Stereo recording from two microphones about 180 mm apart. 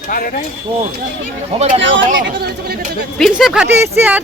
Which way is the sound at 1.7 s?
90° right.